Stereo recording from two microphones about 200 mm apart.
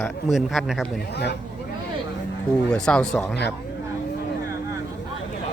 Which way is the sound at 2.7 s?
5° left (ahead or behind).